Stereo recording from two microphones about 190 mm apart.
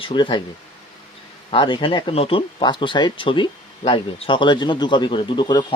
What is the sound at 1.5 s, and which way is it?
Speech, 25° left (ahead or behind).